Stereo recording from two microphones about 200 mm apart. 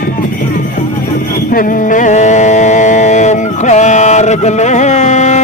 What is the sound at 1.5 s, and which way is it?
Music, 40° left (ahead or behind).